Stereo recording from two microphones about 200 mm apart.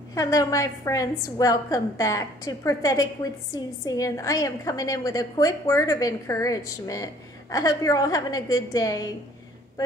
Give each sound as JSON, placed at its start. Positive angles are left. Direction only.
{"t": 0.1, "sound": "a woman's voice", "side_deg": 15}